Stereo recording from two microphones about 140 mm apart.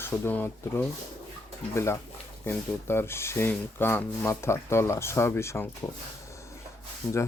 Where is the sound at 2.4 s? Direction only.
15° left (ahead or behind).